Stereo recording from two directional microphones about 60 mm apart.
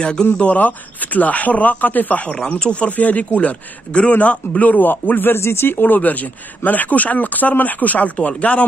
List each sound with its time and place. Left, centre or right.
0.0 s speech: centre
2.3 s speech: centre